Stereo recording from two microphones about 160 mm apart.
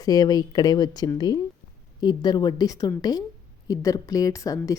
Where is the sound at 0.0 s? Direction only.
25° left (ahead or behind).